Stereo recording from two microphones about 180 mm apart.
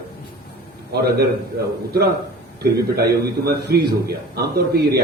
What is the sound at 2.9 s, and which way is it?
A man's voice, 60° right (ahead or behind).